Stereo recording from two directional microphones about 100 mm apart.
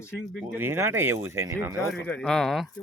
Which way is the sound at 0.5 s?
20° right (ahead or behind).